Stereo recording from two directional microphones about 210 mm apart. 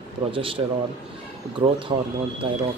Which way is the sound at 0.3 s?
25° right (ahead or behind).